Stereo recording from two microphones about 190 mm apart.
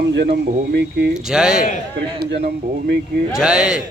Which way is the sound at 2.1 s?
60° right (ahead or behind).